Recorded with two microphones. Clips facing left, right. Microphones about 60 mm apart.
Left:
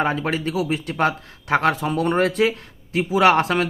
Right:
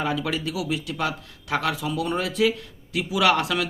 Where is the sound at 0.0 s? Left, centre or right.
Left.